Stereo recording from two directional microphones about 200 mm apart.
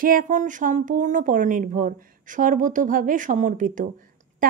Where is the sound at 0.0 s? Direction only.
45° right (ahead or behind).